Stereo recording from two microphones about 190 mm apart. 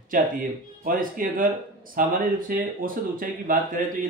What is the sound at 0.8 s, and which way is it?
Speech, 45° right (ahead or behind).